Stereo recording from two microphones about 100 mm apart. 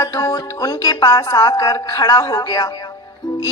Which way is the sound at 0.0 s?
40° left (ahead or behind).